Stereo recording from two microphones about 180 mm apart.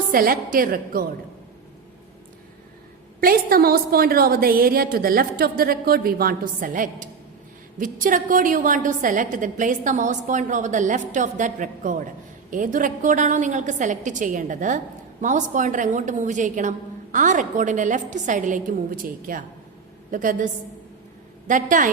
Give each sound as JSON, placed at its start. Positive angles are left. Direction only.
{"t": 0.1, "sound": "a woman's voice", "side_deg": -50}
{"t": 3.2, "sound": "a woman's voice", "side_deg": -55}